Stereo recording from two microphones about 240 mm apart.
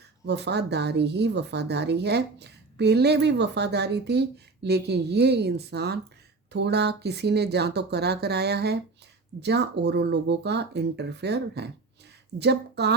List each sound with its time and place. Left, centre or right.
0.3 s speech: right